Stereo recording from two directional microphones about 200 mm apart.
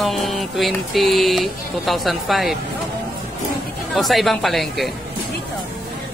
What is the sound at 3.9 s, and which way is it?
Speech, centre (ahead or behind).